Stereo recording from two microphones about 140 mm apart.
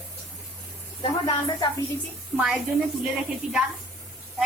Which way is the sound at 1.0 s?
40° left (ahead or behind).